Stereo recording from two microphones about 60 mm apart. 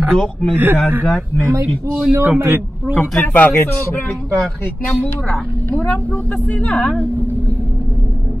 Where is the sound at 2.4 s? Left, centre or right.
Right.